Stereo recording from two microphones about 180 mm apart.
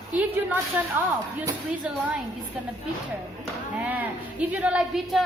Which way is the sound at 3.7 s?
10° right (ahead or behind).